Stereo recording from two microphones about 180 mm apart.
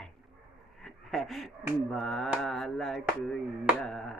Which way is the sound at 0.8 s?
Centre (ahead or behind).